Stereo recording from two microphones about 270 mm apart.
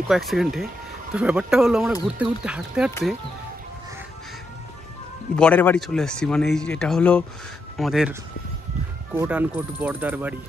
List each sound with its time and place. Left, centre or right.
0.1 s speech: centre
5.3 s speech: centre